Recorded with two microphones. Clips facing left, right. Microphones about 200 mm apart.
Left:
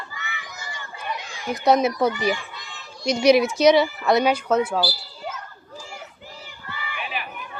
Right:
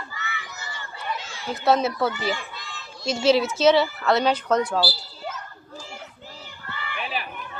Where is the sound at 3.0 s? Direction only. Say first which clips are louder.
Left 3 dB; 15° left (ahead or behind).